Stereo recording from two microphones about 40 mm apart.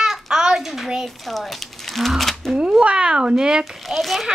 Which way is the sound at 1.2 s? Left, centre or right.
Centre.